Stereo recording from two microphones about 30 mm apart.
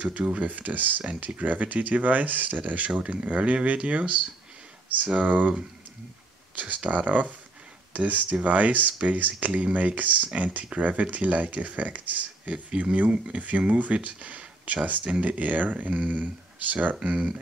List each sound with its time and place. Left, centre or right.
0.0 s speech: right
0.4 s speech: right
6.5 s speech: right